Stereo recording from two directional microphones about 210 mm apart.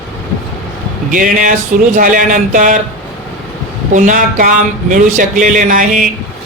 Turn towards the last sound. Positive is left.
turn(degrees=-40)  # may be behind; listen again after turning